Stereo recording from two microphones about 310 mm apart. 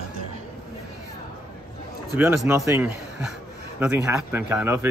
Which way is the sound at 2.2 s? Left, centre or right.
Centre.